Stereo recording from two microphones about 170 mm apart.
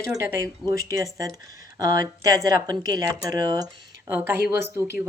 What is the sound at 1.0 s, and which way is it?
Speech, 20° right (ahead or behind).